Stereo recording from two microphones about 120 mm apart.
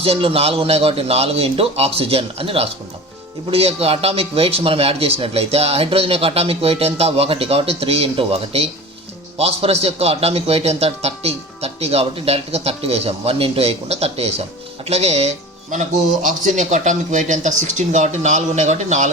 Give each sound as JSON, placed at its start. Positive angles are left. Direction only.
{"t": 0.0, "sound": "a man's voice", "side_deg": -50}
{"t": 16.2, "sound": "speech", "side_deg": -90}